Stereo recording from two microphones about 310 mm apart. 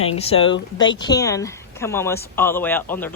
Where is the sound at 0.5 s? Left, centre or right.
Left.